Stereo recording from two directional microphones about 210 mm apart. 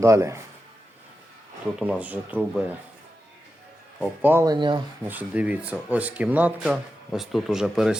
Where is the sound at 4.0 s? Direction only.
10° right (ahead or behind).